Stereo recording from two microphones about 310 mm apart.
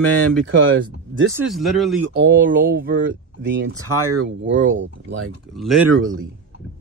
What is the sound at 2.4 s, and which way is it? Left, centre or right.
Speech, right.